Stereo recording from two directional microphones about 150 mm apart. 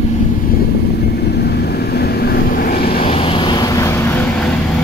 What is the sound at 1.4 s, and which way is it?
Vehicle, 90° left.